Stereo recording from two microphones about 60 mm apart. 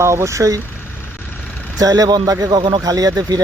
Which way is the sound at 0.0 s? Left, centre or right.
Right.